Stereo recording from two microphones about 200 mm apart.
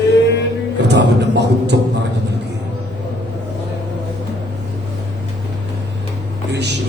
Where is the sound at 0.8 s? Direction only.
60° right (ahead or behind).